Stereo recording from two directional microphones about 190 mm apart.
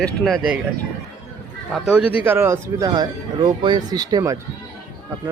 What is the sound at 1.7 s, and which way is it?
Speech, 5° right (ahead or behind).